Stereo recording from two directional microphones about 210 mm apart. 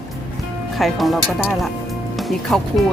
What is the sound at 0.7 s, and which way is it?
Speech, centre (ahead or behind).